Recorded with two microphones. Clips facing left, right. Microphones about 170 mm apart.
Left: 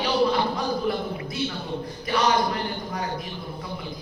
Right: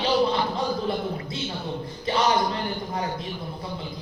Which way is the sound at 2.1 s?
25° right (ahead or behind).